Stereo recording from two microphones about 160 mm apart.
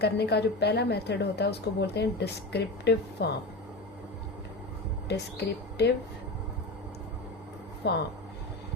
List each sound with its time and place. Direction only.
0.0 s a woman's voice: 90° left
5.0 s speech: 90° left
7.8 s a woman's voice: 90° left